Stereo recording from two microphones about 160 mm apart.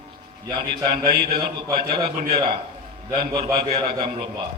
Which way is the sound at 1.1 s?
30° right (ahead or behind).